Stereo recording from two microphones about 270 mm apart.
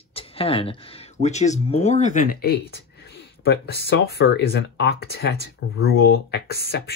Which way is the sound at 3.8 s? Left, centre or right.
Left.